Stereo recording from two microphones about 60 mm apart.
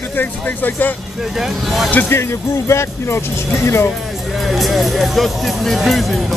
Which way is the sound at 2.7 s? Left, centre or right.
Left.